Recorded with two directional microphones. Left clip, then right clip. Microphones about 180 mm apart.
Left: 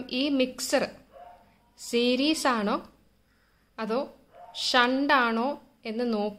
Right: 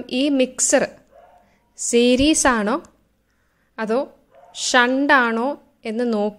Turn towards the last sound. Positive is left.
turn(degrees=-30)  # may be behind; listen again after turning